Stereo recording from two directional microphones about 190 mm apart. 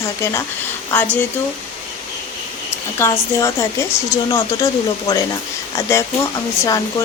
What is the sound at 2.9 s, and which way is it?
Speech, 15° left (ahead or behind).